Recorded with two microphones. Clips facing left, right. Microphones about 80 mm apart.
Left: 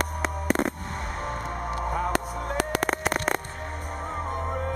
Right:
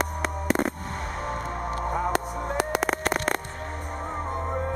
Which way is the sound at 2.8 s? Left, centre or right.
Centre.